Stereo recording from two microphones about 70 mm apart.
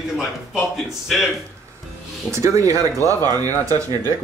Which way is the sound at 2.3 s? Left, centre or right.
Right.